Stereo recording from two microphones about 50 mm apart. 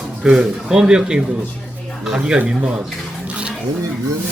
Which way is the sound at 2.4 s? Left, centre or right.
Centre.